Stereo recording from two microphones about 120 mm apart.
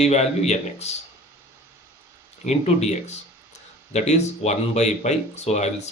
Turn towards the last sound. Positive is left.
turn(degrees=70)  # may be behind; listen again after turning